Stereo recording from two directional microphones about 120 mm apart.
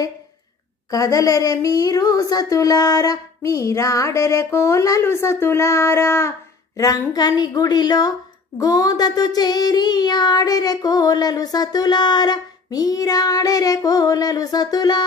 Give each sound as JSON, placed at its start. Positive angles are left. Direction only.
{"t": 0.8, "sound": "speech", "side_deg": 30}
{"t": 6.8, "sound": "child singing", "side_deg": 30}